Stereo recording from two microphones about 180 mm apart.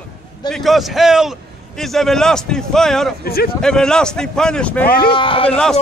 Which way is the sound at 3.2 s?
55° left (ahead or behind).